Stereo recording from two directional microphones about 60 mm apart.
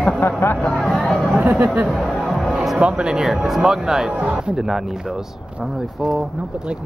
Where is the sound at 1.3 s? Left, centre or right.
Right.